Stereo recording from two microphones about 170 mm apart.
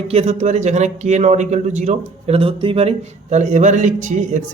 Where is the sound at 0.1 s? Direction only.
40° right (ahead or behind).